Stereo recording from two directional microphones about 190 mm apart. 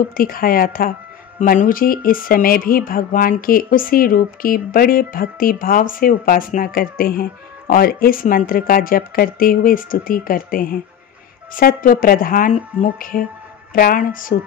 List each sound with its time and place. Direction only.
0.2 s speech: 50° left (ahead or behind)